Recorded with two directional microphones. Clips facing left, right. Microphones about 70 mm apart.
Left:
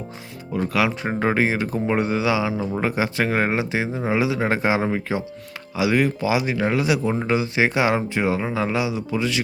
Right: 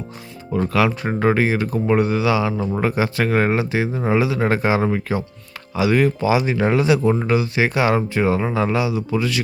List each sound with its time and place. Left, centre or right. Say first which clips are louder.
0.5 s speech: right 3 dB; centre
7.3 s speech: right 1 dB; left; by 8.7 s centre
8.7 s speech: right 3 dB; centre